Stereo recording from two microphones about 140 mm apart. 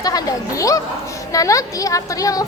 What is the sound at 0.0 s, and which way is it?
A woman's voice, 25° left (ahead or behind).